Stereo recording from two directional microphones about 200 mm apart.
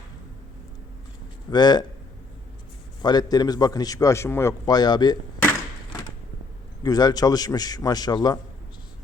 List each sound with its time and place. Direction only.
1.5 s a man's voice: 20° left (ahead or behind)
3.0 s a man's voice: 20° left (ahead or behind)
5.4 s a sound: 10° left (ahead or behind)
6.8 s a man's voice: 20° left (ahead or behind)